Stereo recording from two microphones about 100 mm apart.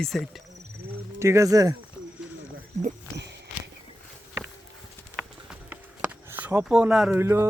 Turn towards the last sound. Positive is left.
turn(degrees=-25)  # may be behind; listen again after turning